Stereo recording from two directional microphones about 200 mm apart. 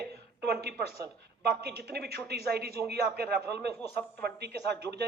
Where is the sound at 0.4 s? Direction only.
55° right (ahead or behind).